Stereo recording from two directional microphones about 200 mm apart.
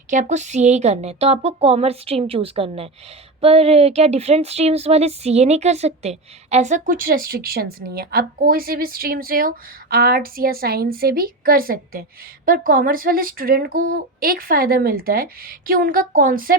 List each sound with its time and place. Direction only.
0.1 s a woman's voice: 35° right (ahead or behind)